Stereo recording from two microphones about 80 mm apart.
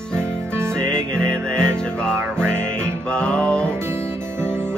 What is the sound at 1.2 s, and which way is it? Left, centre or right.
Music, centre.